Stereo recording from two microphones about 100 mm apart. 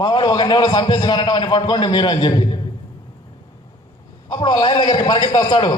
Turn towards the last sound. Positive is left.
turn(degrees=45)  # may be behind; listen again after turning